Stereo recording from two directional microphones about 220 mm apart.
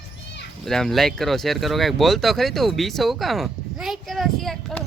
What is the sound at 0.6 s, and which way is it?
Speech, centre (ahead or behind).